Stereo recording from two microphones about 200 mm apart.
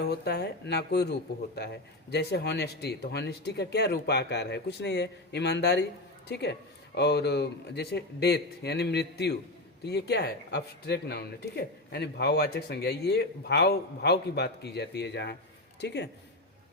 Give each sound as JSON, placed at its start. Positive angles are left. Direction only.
{"t": 0.0, "sound": "speech", "side_deg": 55}